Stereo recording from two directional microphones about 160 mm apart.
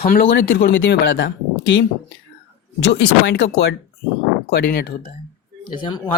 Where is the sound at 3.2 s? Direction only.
90° left.